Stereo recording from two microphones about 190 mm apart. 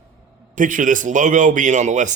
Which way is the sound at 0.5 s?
45° right (ahead or behind).